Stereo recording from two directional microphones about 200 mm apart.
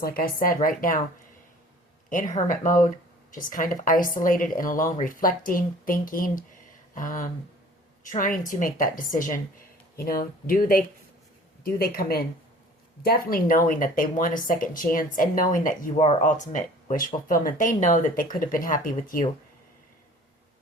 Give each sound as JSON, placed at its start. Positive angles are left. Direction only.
{"t": 0.0, "sound": "a woman's voice", "side_deg": 45}
{"t": 2.0, "sound": "a woman's voice", "side_deg": 40}